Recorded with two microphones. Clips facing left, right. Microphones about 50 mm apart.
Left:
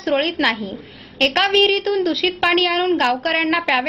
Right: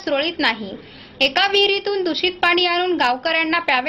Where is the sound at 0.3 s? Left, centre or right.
Left.